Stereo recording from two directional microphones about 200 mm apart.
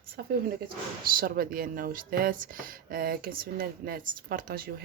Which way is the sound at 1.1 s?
45° right (ahead or behind).